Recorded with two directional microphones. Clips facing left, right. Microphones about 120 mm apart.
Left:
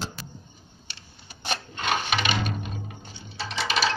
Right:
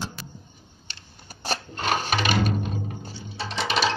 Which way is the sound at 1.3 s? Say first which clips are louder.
Right 2 dB; 40° right (ahead or behind).